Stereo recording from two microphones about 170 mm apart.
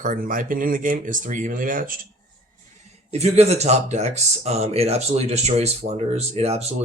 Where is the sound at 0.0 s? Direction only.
55° right (ahead or behind).